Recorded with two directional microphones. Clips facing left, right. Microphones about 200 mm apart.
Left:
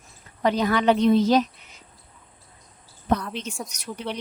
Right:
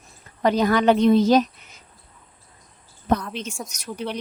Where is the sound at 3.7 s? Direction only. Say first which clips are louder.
Even; 45° right (ahead or behind).